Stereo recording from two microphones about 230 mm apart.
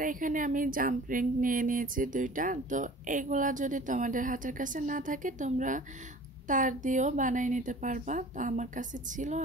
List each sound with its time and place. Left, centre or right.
0.0 s speech: right